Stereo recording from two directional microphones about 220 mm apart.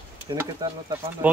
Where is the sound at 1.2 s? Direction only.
10° right (ahead or behind).